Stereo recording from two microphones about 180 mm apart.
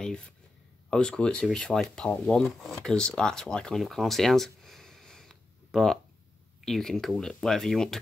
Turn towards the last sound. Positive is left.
turn(degrees=0)  # may be behind; listen again after turning